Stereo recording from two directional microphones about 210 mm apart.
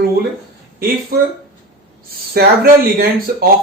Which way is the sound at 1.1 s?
45° right (ahead or behind).